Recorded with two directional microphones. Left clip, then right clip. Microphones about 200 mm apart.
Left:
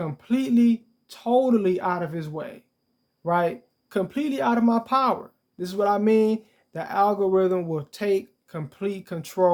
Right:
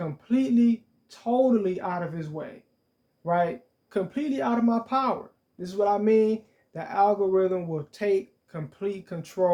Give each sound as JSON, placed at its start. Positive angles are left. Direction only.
{"t": 0.2, "sound": "speech", "side_deg": 40}